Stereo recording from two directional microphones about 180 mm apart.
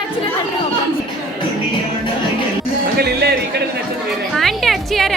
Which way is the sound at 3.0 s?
60° right (ahead or behind).